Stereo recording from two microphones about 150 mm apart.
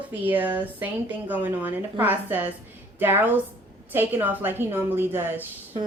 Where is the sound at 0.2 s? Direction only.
10° right (ahead or behind).